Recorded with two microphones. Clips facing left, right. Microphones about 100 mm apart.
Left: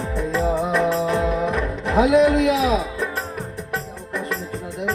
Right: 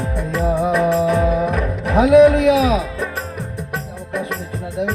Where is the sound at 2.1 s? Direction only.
60° right (ahead or behind).